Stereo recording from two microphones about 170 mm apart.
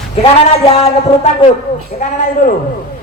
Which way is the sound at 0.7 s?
40° left (ahead or behind).